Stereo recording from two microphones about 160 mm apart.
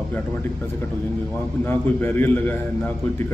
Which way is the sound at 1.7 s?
15° left (ahead or behind).